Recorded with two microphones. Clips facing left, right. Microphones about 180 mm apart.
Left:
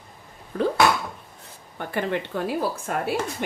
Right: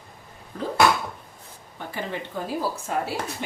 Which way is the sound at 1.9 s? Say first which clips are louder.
Left 6 dB; 65° left (ahead or behind).